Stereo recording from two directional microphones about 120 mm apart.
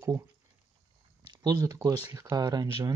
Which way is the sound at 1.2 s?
30° right (ahead or behind).